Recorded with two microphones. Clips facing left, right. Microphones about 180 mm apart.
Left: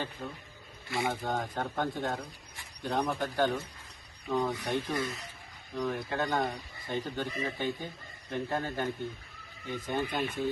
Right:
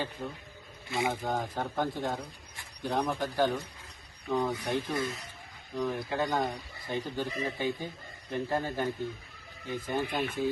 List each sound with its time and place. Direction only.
0.2 s speech: 10° right (ahead or behind)
0.9 s speech: 20° right (ahead or behind)
1.2 s speech: 5° right (ahead or behind)